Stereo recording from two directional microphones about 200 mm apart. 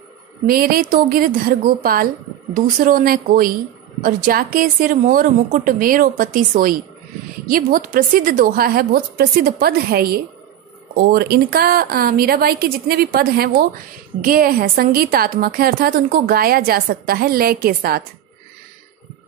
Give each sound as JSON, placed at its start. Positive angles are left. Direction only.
{"t": 0.5, "sound": "a woman's voice", "side_deg": -50}